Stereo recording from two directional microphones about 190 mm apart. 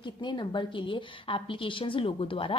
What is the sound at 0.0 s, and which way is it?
A woman's voice, 25° left (ahead or behind).